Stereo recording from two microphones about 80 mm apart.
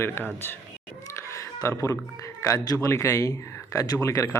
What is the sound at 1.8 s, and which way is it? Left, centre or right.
Speech, left.